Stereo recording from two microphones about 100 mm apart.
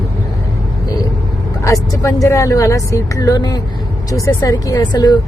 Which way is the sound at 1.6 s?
30° left (ahead or behind).